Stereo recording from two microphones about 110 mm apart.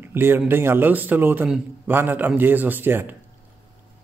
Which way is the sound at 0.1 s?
20° right (ahead or behind).